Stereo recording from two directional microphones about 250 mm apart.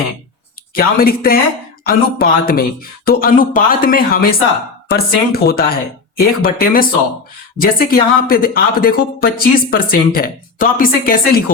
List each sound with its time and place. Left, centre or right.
0.8 s speech: left